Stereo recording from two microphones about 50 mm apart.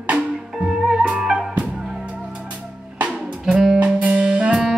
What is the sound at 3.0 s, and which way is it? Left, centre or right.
Music, right.